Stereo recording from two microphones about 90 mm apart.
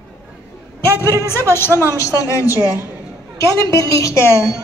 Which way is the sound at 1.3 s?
30° left (ahead or behind).